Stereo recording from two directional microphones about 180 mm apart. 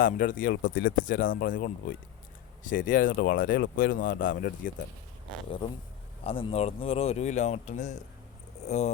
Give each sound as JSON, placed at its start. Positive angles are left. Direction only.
{"t": 0.0, "sound": "speech", "side_deg": 50}
{"t": 6.2, "sound": "speech", "side_deg": 30}